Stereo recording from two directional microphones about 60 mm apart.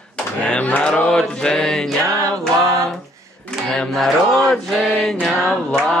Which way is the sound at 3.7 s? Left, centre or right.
Centre.